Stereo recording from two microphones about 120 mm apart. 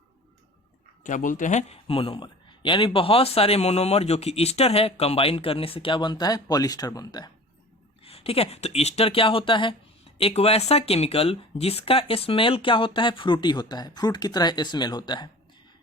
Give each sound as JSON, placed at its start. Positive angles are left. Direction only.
{"t": 1.0, "sound": "speech", "side_deg": 90}
{"t": 1.9, "sound": "a man's voice", "side_deg": 50}
{"t": 8.0, "sound": "a man's voice", "side_deg": 55}
{"t": 10.2, "sound": "a man's voice", "side_deg": 55}